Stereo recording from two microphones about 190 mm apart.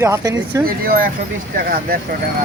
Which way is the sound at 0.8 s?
50° right (ahead or behind).